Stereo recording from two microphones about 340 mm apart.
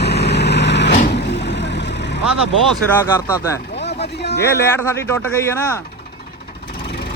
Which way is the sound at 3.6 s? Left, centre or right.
Left.